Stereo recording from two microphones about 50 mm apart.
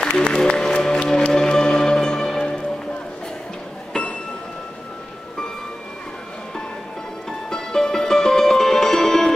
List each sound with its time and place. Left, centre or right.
0.0 s music: left
7.2 s music: centre